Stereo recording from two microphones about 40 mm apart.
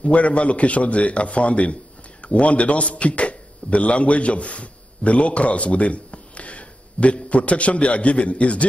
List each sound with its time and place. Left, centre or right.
0.0 s a man's voice: left